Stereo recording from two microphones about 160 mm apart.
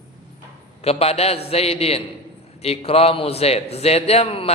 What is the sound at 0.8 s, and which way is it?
A man's voice, 40° left (ahead or behind).